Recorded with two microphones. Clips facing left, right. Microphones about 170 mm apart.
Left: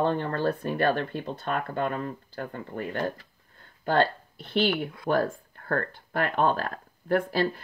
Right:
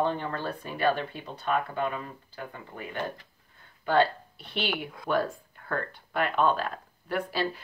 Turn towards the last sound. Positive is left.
turn(degrees=45)  # may be behind; listen again after turning